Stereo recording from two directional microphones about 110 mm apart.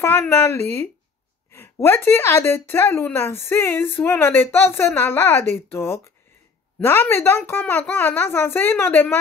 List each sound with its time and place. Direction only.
0.0 s a woman's voice: 20° left (ahead or behind)